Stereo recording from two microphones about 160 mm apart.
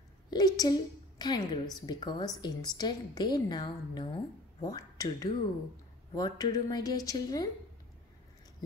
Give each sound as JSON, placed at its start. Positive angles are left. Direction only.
{"t": 0.3, "sound": "a woman's voice", "side_deg": 25}